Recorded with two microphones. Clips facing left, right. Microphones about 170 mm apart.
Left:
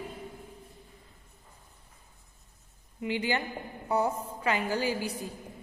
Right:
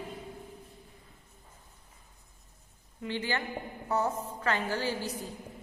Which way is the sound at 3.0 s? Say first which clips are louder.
Left 3 dB; 15° left (ahead or behind).